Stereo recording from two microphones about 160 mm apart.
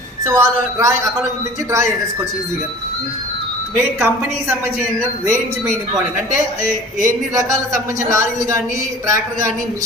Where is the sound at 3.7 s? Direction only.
15° right (ahead or behind).